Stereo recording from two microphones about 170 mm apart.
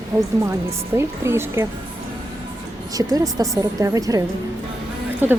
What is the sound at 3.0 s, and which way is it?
A woman's voice, 20° right (ahead or behind).